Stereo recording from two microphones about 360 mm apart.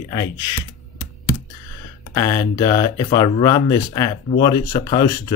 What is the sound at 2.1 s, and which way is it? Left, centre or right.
Speech, centre.